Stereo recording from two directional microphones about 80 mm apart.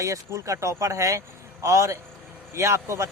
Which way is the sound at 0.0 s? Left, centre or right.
Right.